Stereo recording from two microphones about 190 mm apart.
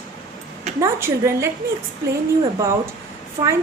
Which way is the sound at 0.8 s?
15° right (ahead or behind).